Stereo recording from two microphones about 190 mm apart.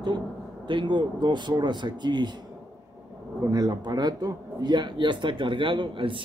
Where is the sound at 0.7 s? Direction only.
25° right (ahead or behind).